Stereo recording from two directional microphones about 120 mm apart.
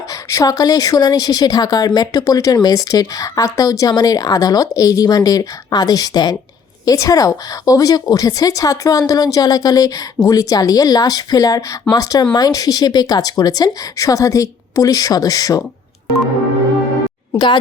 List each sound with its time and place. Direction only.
0.1 s speech: 25° left (ahead or behind)
17.3 s speech: 40° left (ahead or behind)